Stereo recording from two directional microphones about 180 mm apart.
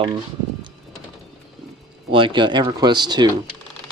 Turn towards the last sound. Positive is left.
turn(degrees=-25)  # may be behind; listen again after turning